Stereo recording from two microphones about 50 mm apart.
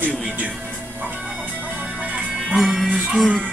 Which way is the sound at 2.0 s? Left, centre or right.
Right.